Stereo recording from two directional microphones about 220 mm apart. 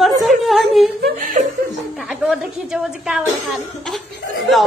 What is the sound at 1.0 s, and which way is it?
Whimper, 35° right (ahead or behind).